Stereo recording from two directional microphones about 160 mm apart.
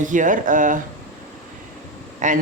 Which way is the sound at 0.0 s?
55° right (ahead or behind).